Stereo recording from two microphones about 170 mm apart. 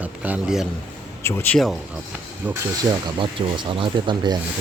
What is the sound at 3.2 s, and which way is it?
Speech, 30° right (ahead or behind).